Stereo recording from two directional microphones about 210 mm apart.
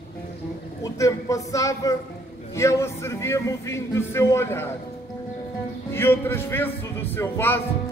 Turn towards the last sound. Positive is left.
turn(degrees=10)  # may be behind; listen again after turning